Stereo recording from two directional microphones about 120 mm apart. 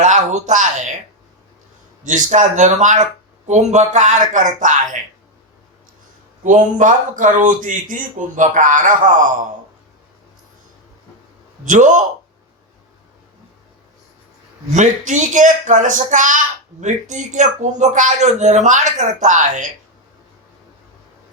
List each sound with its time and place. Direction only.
0.0 s speech: 85° right
2.0 s speech: 90° right
3.4 s speech: 75° right (ahead or behind); by 4.8 s 90° right
6.4 s speech: 90° right
11.6 s speech: 90° right
14.7 s speech: 80° right